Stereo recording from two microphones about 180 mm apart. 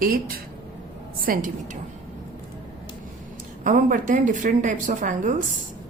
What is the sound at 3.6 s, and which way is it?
A woman's voice, 45° right (ahead or behind).